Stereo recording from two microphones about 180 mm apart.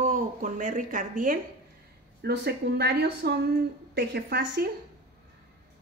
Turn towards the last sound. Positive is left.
turn(degrees=-55)  # may be behind; listen again after turning